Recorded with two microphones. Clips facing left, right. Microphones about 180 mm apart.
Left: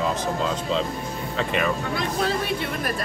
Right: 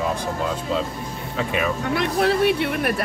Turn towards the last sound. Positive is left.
turn(degrees=-65)  # may be behind; listen again after turning